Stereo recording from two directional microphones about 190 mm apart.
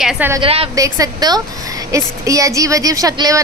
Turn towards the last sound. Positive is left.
turn(degrees=-20)  # may be behind; listen again after turning